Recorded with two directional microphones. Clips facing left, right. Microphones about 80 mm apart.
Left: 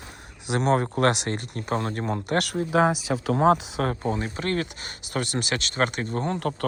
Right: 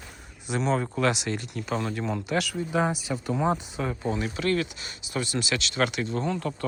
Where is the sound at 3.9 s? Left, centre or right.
Left.